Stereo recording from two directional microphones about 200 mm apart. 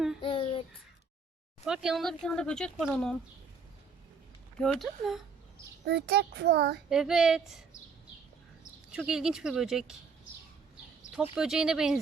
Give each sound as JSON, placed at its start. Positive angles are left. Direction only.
{"t": 0.2, "sound": "a sound", "side_deg": 25}
{"t": 1.6, "sound": "speech", "side_deg": -5}
{"t": 4.5, "sound": "speech", "side_deg": 0}
{"t": 5.8, "sound": "a child's voice", "side_deg": -55}
{"t": 6.9, "sound": "speech", "side_deg": -5}
{"t": 8.9, "sound": "speech", "side_deg": -5}
{"t": 11.2, "sound": "speech", "side_deg": -5}